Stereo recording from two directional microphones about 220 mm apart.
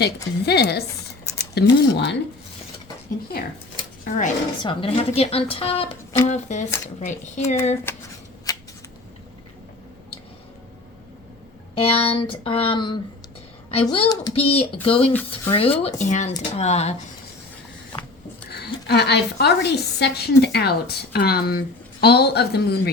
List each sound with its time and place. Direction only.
0.0 s a woman's voice: 45° left (ahead or behind)
1.2 s a sound: 15° left (ahead or behind)
1.5 s a woman's voice: 50° left (ahead or behind)
4.0 s speech: 35° left (ahead or behind)
7.9 s speech: 10° left (ahead or behind)
8.5 s a sound: 15° left (ahead or behind)
11.7 s speech: 25° left (ahead or behind)
18.5 s a woman's voice: 50° left (ahead or behind)